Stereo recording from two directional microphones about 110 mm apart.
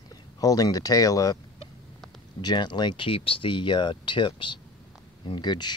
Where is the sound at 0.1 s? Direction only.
35° left (ahead or behind).